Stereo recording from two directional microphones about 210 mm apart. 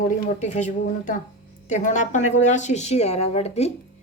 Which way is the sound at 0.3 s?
35° left (ahead or behind).